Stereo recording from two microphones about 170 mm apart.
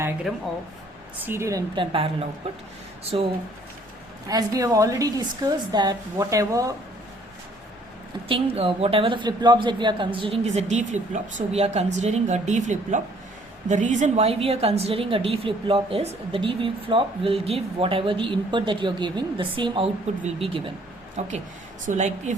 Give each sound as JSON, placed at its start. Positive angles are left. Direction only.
{"t": 1.2, "sound": "a woman's voice", "side_deg": -15}
{"t": 4.3, "sound": "a woman's voice", "side_deg": -20}
{"t": 8.3, "sound": "a woman's voice", "side_deg": -35}